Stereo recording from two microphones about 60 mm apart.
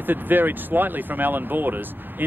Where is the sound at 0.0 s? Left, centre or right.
Right.